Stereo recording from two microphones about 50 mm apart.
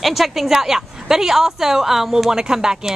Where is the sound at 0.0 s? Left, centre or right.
Centre.